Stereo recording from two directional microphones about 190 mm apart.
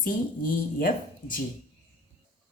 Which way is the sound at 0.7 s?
50° left (ahead or behind).